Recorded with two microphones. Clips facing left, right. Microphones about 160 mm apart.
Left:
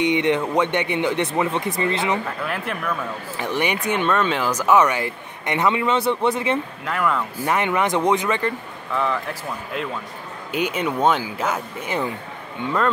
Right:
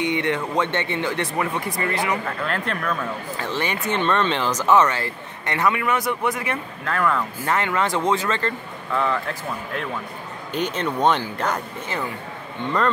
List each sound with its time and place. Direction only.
0.0 s speech: 20° left (ahead or behind)
2.4 s speech: 10° left (ahead or behind); by 6.6 s 25° left (ahead or behind)
6.8 s speech: 10° left (ahead or behind)
8.9 s speech: centre (ahead or behind)
12.6 s speech: 5° left (ahead or behind)